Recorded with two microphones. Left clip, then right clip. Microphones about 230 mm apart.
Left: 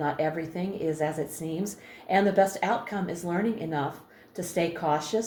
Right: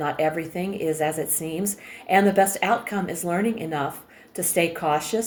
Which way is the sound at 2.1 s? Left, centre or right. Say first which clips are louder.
Right 4 dB; right.